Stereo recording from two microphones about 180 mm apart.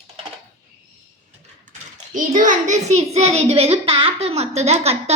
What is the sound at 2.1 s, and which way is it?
A woman's voice, 45° right (ahead or behind).